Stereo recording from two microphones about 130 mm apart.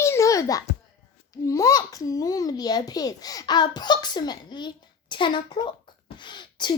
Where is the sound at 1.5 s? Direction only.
25° left (ahead or behind).